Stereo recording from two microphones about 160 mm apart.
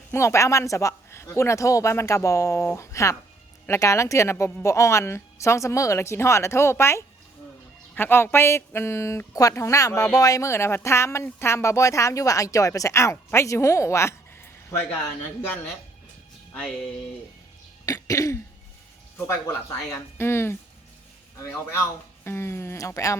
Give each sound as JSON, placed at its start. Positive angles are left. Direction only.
{"t": 0.1, "sound": "speech", "side_deg": 15}
{"t": 17.8, "sound": "speech", "side_deg": 20}